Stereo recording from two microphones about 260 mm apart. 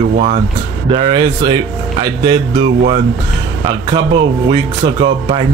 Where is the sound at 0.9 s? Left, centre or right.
Right.